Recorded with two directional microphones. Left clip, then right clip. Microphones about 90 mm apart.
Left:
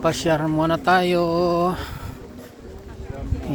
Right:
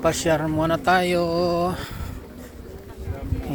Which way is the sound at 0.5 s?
55° left (ahead or behind).